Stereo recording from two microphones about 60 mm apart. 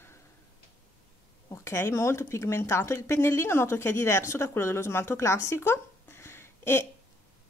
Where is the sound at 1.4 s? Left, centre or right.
Left.